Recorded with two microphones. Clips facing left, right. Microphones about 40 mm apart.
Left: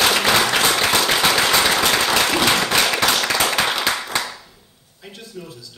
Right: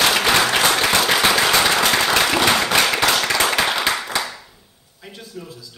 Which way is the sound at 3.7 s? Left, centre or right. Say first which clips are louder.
Right 1 dB; centre.